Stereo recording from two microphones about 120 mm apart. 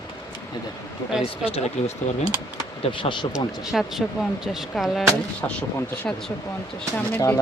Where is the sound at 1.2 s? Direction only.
55° left (ahead or behind).